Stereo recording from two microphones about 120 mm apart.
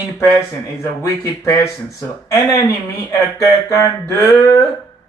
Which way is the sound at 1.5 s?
25° left (ahead or behind).